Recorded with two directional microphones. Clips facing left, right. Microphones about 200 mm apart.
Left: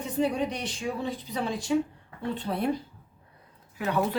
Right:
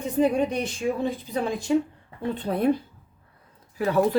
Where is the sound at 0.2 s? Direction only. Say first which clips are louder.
Right 5 dB; 50° right (ahead or behind).